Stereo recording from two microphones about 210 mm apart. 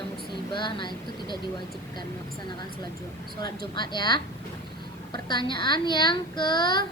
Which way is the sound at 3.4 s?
20° left (ahead or behind).